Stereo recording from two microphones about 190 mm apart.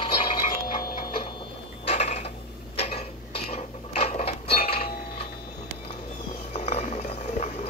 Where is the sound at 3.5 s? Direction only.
30° left (ahead or behind).